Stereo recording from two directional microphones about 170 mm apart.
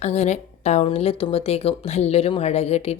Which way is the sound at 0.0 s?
40° left (ahead or behind).